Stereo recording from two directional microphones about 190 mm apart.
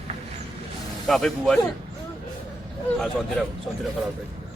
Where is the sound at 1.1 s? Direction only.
Centre (ahead or behind).